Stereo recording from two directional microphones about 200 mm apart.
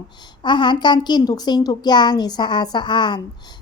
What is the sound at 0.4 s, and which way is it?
A child's voice, 20° left (ahead or behind).